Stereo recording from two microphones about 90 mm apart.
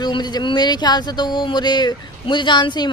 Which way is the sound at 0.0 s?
55° left (ahead or behind).